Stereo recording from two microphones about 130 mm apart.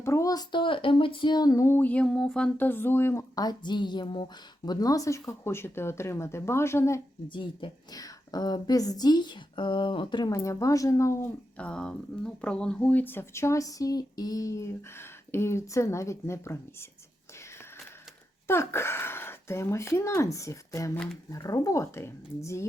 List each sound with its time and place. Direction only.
0.0 s speech: 25° left (ahead or behind)
7.3 s speech: 40° left (ahead or behind); by 11.3 s 20° left (ahead or behind)
11.5 s speech: 5° left (ahead or behind)
18.4 s speech: 20° left (ahead or behind)